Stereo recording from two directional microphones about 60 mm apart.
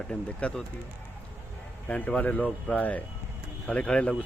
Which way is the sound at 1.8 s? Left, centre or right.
Left.